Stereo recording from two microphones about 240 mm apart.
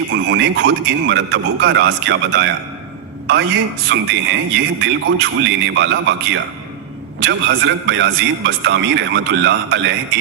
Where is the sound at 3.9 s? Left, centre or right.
Right.